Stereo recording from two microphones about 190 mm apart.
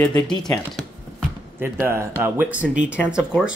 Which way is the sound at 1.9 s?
10° right (ahead or behind).